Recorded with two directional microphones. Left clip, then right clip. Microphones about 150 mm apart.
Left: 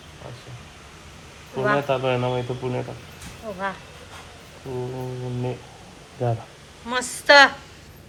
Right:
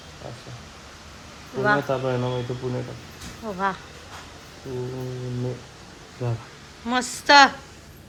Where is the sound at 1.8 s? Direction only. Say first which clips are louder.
Left 3 dB; 50° left (ahead or behind).